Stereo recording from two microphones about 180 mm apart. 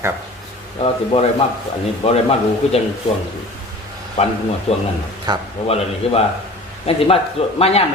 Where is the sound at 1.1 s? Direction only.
30° left (ahead or behind).